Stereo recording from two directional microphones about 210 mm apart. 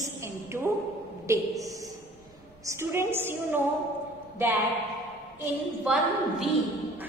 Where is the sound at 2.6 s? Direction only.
10° right (ahead or behind).